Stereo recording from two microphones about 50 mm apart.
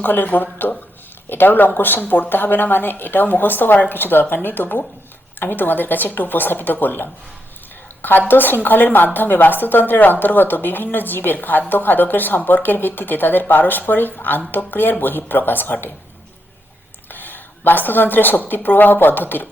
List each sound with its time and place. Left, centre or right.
0.0 s speech: left
8.3 s speech: left
17.1 s speech: left